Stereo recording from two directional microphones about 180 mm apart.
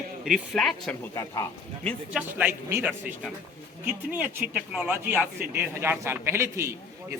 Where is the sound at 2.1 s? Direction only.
10° right (ahead or behind).